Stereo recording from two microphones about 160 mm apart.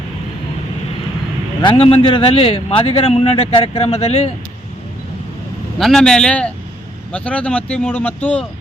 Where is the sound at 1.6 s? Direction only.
35° left (ahead or behind).